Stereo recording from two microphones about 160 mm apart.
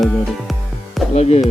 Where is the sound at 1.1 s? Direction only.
40° left (ahead or behind).